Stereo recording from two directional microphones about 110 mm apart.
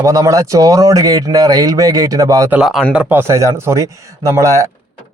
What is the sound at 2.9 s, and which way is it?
Speech, 15° right (ahead or behind).